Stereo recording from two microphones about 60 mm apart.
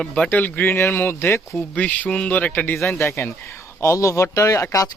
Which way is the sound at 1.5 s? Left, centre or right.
Left.